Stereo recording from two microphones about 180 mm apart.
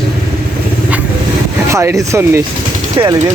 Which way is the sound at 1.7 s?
15° right (ahead or behind).